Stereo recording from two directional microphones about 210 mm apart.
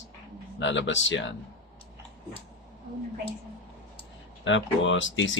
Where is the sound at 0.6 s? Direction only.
60° left (ahead or behind).